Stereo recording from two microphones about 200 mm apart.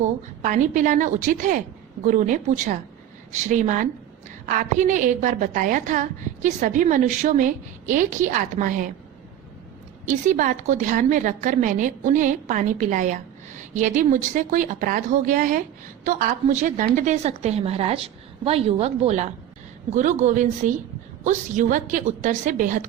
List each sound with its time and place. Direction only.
0.0 s a woman's voice: 40° right (ahead or behind)
10.1 s a woman's voice: 40° right (ahead or behind)